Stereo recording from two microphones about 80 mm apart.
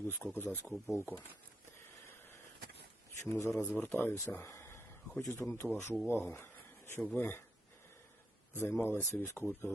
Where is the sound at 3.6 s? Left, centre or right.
Left.